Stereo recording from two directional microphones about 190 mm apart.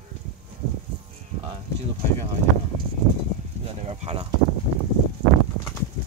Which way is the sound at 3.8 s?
30° right (ahead or behind).